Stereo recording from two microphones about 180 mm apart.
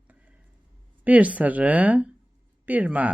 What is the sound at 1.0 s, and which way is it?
Speech, 10° right (ahead or behind).